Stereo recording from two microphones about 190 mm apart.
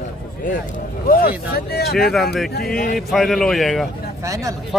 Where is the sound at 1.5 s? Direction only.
55° left (ahead or behind).